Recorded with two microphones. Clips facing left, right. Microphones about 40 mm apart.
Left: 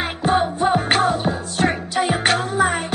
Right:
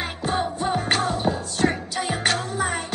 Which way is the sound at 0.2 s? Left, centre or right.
Left.